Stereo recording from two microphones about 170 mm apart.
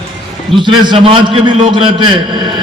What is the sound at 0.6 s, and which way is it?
A man's voice, 30° right (ahead or behind).